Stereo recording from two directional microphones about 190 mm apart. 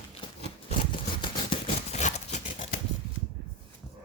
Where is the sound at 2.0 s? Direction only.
35° left (ahead or behind).